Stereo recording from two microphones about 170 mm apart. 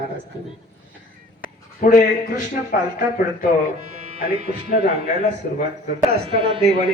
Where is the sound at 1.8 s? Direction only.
50° left (ahead or behind).